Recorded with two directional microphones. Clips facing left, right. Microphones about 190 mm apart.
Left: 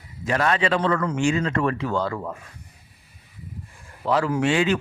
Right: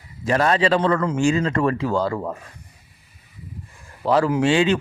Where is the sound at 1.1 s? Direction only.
40° right (ahead or behind).